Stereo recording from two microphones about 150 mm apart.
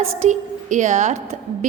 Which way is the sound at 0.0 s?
50° right (ahead or behind).